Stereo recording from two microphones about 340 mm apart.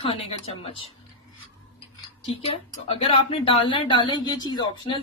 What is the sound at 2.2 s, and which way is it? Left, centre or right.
Speech, centre.